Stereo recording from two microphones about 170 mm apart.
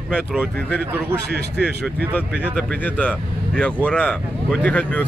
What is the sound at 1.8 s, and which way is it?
Speech, 5° left (ahead or behind).